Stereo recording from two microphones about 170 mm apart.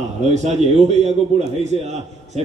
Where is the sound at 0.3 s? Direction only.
45° right (ahead or behind).